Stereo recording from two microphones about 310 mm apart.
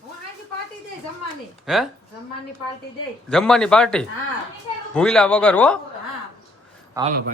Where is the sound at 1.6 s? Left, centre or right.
Centre.